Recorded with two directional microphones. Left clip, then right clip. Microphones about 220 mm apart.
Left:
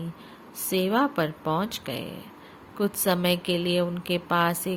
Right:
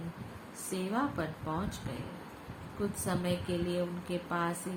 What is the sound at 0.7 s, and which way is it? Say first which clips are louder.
Speech: left 11 dB; 45° left (ahead or behind).